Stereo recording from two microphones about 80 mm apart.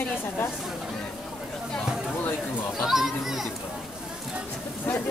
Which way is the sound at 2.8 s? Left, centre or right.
Centre.